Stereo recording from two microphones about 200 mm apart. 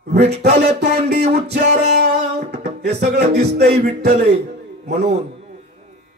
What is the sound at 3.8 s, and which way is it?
Speech, 55° right (ahead or behind).